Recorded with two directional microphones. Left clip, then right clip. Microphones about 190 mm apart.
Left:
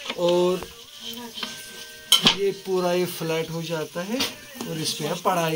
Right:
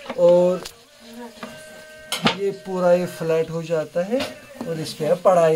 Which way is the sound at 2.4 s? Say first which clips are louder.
Right 4 dB; 30° right (ahead or behind).